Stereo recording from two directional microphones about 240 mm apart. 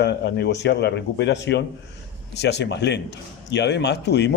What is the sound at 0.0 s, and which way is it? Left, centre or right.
Speech, left.